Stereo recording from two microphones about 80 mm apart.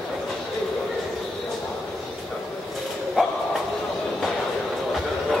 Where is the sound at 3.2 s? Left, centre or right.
Centre.